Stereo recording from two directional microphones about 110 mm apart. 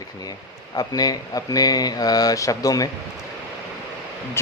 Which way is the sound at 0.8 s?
35° left (ahead or behind).